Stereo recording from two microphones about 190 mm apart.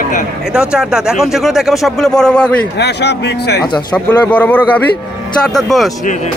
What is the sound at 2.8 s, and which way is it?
Speech, 60° left (ahead or behind).